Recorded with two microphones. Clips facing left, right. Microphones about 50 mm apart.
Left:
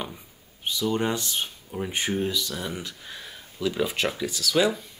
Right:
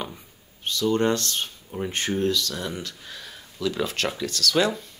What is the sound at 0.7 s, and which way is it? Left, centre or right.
Speech, centre.